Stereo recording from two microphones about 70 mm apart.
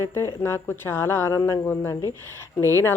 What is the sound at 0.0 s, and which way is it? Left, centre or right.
Speech, left.